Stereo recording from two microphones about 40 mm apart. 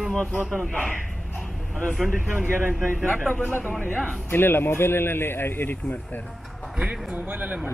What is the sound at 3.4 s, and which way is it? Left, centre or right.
Speech, left.